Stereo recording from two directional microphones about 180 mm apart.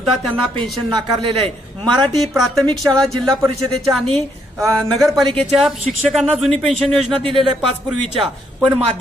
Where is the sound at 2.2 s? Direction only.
Centre (ahead or behind).